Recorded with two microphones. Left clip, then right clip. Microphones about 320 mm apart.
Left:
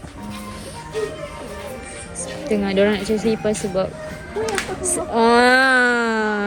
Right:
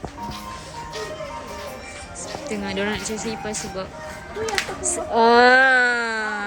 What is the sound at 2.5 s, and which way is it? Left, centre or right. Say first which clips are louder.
Speech: left 8 dB; centre.